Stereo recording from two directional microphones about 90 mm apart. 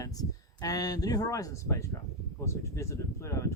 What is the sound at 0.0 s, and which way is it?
A man's voice, 40° left (ahead or behind).